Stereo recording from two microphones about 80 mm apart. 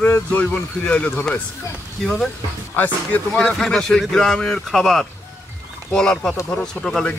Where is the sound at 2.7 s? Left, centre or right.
Left.